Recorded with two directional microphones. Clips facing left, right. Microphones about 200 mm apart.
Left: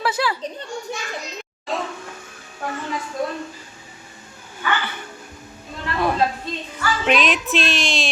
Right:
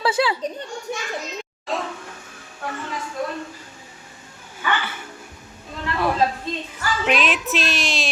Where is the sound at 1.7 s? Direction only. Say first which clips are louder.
Even; centre (ahead or behind).